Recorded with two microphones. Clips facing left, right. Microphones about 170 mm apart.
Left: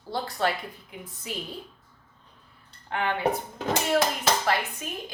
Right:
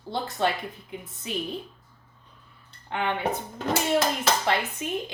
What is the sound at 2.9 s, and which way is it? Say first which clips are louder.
Speech: even; 20° right (ahead or behind).